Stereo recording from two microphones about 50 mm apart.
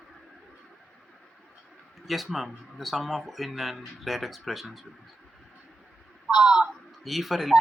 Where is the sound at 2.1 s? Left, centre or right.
Centre.